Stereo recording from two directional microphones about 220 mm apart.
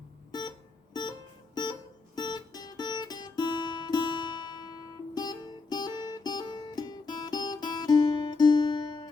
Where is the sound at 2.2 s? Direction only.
20° left (ahead or behind).